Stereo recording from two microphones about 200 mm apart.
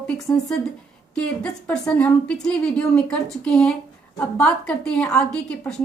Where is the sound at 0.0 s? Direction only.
5° left (ahead or behind).